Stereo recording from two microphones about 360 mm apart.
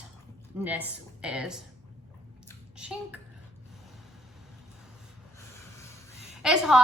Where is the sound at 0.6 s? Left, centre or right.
Centre.